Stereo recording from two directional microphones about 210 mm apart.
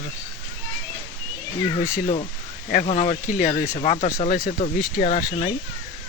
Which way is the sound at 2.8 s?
35° left (ahead or behind).